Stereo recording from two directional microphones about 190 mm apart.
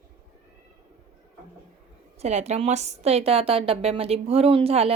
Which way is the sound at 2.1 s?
35° right (ahead or behind).